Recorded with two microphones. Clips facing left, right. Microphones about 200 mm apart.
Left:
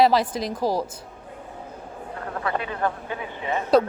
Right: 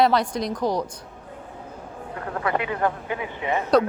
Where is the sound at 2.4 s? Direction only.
20° right (ahead or behind).